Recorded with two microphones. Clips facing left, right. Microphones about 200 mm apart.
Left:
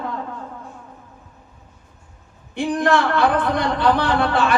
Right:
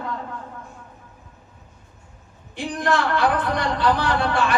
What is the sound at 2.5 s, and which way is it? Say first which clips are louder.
A man's voice: left 5 dB; 55° left (ahead or behind).